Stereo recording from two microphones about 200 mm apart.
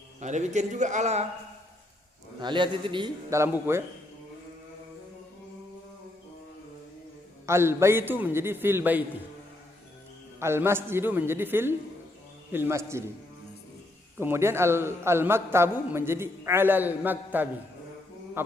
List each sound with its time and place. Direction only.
0.2 s speech: 35° right (ahead or behind)
2.4 s a man's voice: 25° right (ahead or behind)
7.4 s a man's voice: 10° right (ahead or behind)
10.4 s a man's voice: 10° right (ahead or behind)
14.2 s a man's voice: 10° right (ahead or behind)
18.4 s a sound: 10° right (ahead or behind)